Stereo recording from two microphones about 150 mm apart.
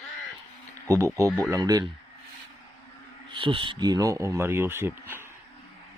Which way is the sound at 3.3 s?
35° right (ahead or behind).